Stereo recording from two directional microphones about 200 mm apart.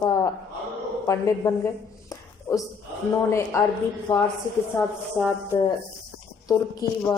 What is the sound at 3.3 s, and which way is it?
A woman's voice, 15° left (ahead or behind).